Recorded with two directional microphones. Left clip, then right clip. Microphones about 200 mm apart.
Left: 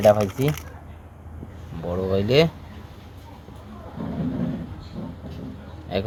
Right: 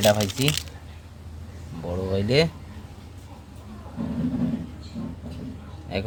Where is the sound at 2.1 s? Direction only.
5° right (ahead or behind).